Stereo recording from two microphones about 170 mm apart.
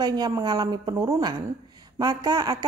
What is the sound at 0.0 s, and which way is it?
Speech, 25° right (ahead or behind).